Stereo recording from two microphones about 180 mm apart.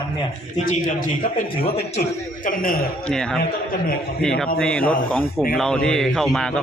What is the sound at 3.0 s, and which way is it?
A man's voice, 5° left (ahead or behind).